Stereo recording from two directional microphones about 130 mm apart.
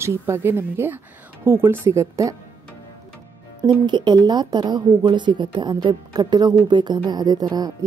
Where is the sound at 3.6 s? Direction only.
35° right (ahead or behind).